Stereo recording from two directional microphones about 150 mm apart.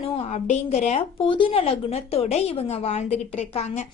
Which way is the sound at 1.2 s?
35° left (ahead or behind).